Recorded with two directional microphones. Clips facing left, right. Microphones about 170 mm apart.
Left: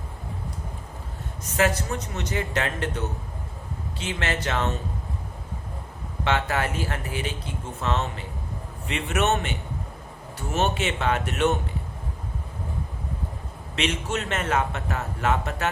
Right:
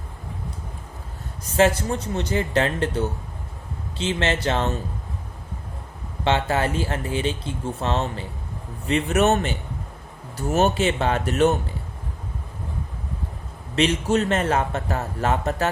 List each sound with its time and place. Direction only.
1.5 s a man's voice: 30° right (ahead or behind)
6.2 s a man's voice: 30° right (ahead or behind)
13.7 s a man's voice: 35° right (ahead or behind)